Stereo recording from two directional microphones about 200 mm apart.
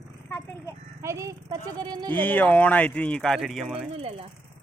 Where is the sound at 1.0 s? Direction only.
15° right (ahead or behind).